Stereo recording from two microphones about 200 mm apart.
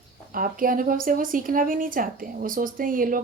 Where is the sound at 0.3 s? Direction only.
45° right (ahead or behind).